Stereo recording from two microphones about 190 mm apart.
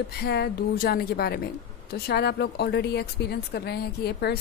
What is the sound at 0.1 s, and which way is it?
A woman's voice, 60° left (ahead or behind).